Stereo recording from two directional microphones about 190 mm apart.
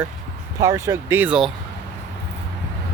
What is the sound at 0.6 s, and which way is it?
Speech, 15° right (ahead or behind).